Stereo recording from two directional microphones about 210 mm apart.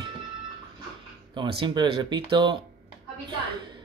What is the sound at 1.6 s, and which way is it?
Speech, 20° right (ahead or behind).